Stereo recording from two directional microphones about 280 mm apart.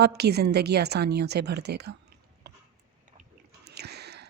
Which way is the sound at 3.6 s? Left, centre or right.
Right.